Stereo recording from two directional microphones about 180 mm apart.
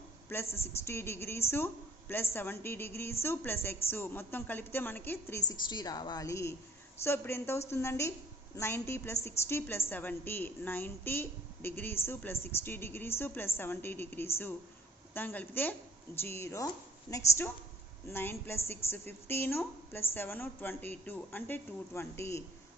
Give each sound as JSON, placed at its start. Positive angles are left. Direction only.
{"t": 0.4, "sound": "a woman's voice", "side_deg": 35}
{"t": 0.9, "sound": "a woman's voice", "side_deg": 15}